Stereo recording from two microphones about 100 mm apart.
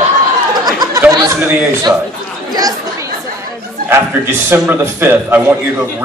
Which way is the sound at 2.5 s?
40° right (ahead or behind).